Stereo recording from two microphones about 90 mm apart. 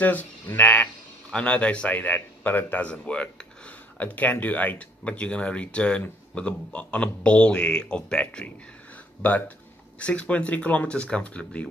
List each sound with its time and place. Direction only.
0.0 s a man's voice: 20° left (ahead or behind)
8.9 s a sound: 15° left (ahead or behind)
9.9 s a man's voice: 15° left (ahead or behind)